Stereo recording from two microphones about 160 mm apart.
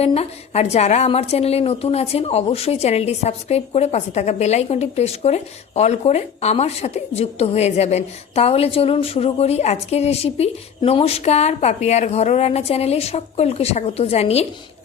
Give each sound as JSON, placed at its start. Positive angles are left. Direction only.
{"t": 0.0, "sound": "a woman's voice", "side_deg": 40}